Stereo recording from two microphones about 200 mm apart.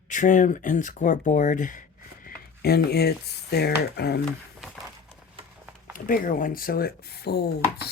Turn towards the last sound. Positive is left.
turn(degrees=55)  # may be behind; listen again after turning